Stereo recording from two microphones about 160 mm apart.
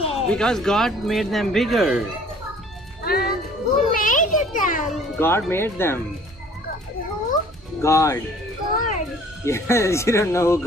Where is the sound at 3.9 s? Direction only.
55° left (ahead or behind).